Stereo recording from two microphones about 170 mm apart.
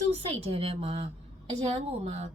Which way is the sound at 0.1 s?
35° right (ahead or behind).